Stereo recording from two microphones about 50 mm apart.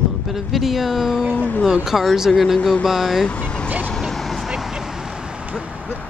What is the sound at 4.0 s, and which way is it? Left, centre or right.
Vehicle, centre.